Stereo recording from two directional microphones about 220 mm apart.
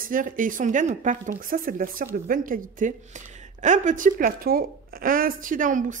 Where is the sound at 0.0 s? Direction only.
40° right (ahead or behind).